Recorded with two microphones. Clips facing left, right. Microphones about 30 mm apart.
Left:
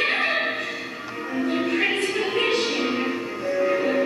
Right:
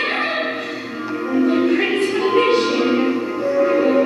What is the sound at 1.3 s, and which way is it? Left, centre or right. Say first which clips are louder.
Music: right 7 dB; centre.